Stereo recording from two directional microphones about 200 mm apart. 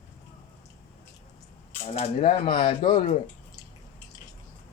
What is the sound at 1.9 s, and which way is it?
Speech, 30° left (ahead or behind).